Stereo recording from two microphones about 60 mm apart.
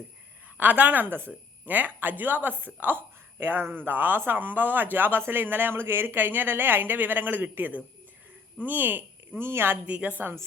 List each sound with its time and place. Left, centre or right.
0.5 s a woman's voice: right
9.4 s speech: right
9.8 s a woman's voice: right